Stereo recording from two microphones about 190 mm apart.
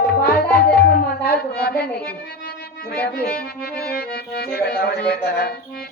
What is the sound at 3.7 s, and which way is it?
Music, 55° left (ahead or behind).